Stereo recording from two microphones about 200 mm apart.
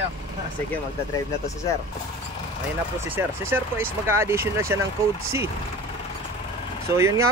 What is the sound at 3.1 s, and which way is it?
Speech, 10° right (ahead or behind).